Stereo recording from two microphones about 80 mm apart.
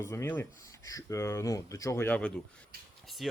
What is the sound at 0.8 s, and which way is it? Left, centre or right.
Speech, left.